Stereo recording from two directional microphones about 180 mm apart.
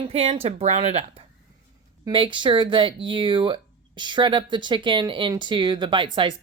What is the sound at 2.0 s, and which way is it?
Speech, 30° right (ahead or behind).